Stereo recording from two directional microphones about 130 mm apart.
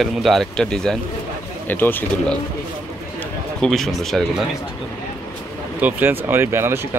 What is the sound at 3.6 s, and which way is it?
Speech, centre (ahead or behind).